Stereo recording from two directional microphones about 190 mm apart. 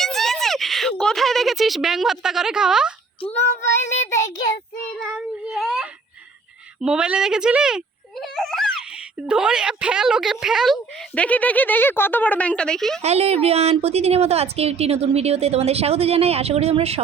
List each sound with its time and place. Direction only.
0.0 s speech: centre (ahead or behind)
3.6 s speech: 15° left (ahead or behind)
4.9 s a sound: centre (ahead or behind)
6.8 s a child's voice: 5° right (ahead or behind)
13.0 s a woman's voice: 35° right (ahead or behind)